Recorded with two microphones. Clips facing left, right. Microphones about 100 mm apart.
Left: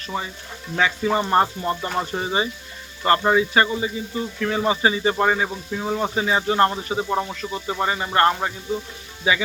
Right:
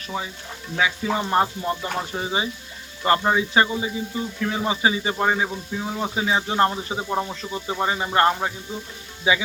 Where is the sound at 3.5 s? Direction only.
15° right (ahead or behind).